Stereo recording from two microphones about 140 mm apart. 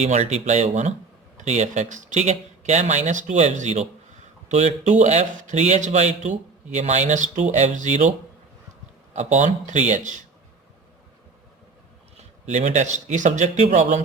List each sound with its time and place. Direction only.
0.0 s speech: 50° right (ahead or behind)
9.1 s speech: 60° right (ahead or behind)
12.5 s speech: 55° right (ahead or behind)